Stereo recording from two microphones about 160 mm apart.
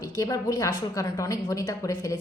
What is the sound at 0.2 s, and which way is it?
A woman's voice, 20° left (ahead or behind).